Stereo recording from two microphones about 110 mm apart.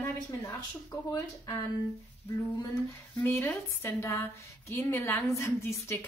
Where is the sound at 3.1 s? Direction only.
20° left (ahead or behind).